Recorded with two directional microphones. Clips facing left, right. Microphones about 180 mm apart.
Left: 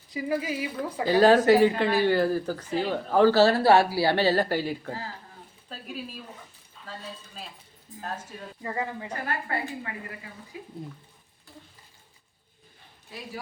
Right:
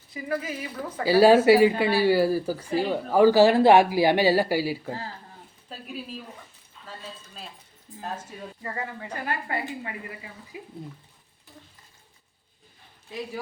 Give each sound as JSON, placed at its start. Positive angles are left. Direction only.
{"t": 0.1, "sound": "speech", "side_deg": 10}
{"t": 1.0, "sound": "speech", "side_deg": -10}
{"t": 8.6, "sound": "speech", "side_deg": 15}
{"t": 9.2, "sound": "a woman's voice", "side_deg": -20}